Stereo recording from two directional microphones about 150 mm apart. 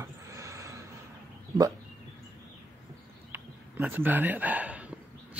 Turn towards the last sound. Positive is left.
turn(degrees=-10)  # may be behind; listen again after turning